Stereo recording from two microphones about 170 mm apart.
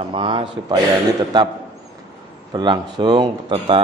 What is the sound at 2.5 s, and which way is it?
A man's voice, 25° right (ahead or behind).